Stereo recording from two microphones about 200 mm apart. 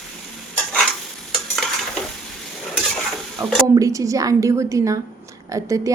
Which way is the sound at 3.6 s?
15° right (ahead or behind).